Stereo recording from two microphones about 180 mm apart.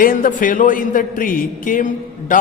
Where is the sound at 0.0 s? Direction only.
50° left (ahead or behind).